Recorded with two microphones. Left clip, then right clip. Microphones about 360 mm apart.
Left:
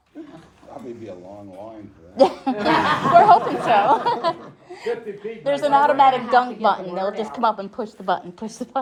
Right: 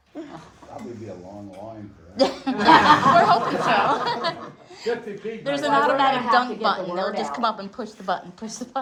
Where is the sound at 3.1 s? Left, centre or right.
Centre.